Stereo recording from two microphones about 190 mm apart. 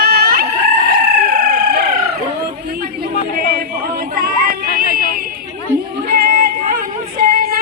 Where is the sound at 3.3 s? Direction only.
50° right (ahead or behind).